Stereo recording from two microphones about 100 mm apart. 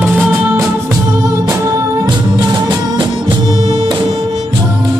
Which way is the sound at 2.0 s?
45° right (ahead or behind).